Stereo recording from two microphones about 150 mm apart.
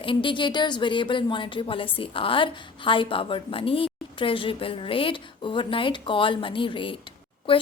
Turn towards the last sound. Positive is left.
turn(degrees=35)  # may be behind; listen again after turning